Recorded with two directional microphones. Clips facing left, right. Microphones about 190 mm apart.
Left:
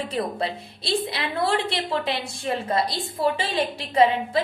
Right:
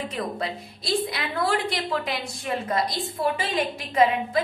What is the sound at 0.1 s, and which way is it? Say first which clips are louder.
A woman's voice: left 3 dB; 30° left (ahead or behind).